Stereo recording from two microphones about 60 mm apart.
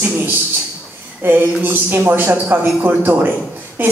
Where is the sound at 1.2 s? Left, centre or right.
Right.